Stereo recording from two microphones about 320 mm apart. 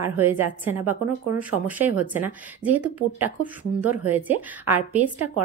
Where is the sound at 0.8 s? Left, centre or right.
Right.